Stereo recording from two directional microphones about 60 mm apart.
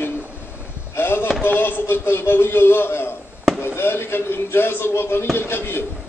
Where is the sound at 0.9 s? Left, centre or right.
Left.